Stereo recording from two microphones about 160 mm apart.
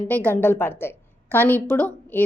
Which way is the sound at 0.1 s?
10° left (ahead or behind).